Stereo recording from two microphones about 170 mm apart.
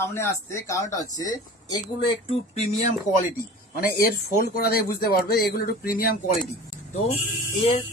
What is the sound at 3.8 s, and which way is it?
Speech, 65° left (ahead or behind).